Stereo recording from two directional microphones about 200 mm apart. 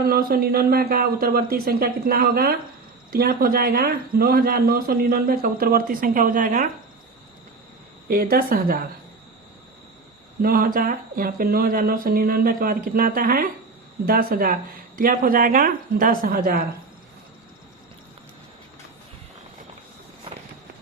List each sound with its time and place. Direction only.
0.0 s a man's voice: 50° right (ahead or behind)
8.0 s a man's voice: 45° right (ahead or behind)
10.4 s a man's voice: 45° right (ahead or behind)